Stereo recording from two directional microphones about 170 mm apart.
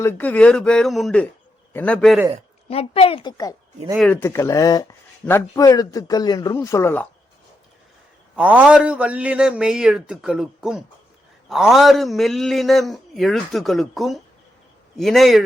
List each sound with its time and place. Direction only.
0.0 s a man's voice: 10° left (ahead or behind)
2.6 s speech: 35° left (ahead or behind)
4.1 s a man's voice: 15° left (ahead or behind)
8.4 s a man's voice: 5° right (ahead or behind)